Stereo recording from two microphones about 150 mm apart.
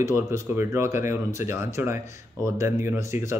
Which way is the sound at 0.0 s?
15° right (ahead or behind).